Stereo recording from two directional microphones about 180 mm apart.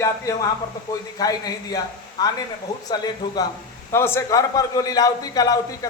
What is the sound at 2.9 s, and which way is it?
A man's voice, 20° left (ahead or behind).